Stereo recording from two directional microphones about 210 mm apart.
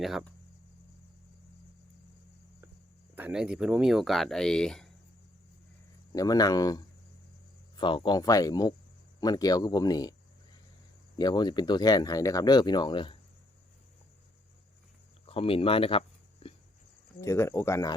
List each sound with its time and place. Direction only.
0.0 s speech: centre (ahead or behind)
3.2 s speech: 5° right (ahead or behind)
6.1 s speech: 20° left (ahead or behind)
11.2 s speech: 20° left (ahead or behind)
15.3 s cricket: 25° left (ahead or behind)
17.2 s speech: 15° left (ahead or behind)